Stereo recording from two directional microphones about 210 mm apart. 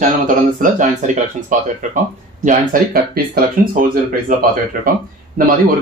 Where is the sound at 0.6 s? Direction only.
35° right (ahead or behind).